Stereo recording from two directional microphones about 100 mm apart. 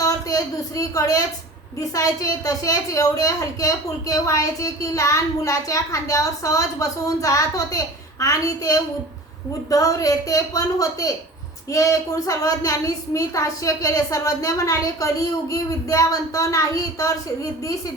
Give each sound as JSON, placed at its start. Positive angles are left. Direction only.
{"t": 0.0, "sound": "a woman's voice", "side_deg": 35}